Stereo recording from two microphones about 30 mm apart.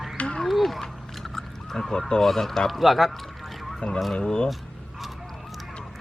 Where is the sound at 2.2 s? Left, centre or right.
Centre.